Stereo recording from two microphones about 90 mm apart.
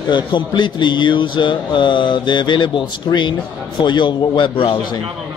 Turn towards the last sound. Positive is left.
turn(degrees=70)  # may be behind; listen again after turning